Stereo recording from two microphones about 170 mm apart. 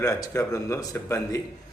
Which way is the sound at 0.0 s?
20° left (ahead or behind).